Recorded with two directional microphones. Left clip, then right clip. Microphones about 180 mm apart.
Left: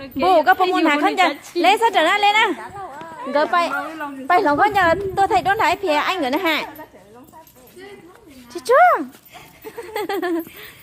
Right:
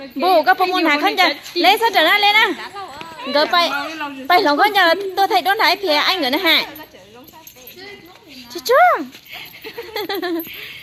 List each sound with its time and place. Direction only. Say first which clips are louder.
0.2 s a sound: right 1 dB; 10° left (ahead or behind)
0.6 s a woman's voice: right 1 dB; centre (ahead or behind)
3.7 s a woman's voice: right 2 dB; 35° left (ahead or behind)
4.3 s a woman's voice: right 2 dB; centre (ahead or behind)
8.7 s a woman's voice: even; 5° left (ahead or behind)
9.6 s a sound: even; 15° left (ahead or behind)